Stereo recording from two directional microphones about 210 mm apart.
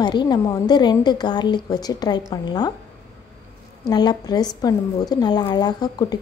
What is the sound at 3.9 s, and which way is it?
A woman's voice, 20° left (ahead or behind).